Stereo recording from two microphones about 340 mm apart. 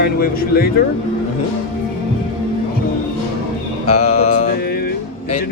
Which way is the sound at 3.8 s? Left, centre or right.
Centre.